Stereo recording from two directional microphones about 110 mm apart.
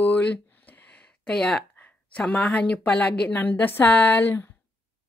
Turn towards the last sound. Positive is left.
turn(degrees=20)  # may be behind; listen again after turning